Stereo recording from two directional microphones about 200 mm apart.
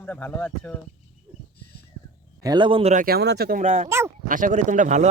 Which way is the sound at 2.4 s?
20° right (ahead or behind).